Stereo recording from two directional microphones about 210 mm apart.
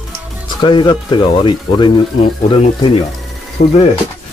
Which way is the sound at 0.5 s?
20° left (ahead or behind).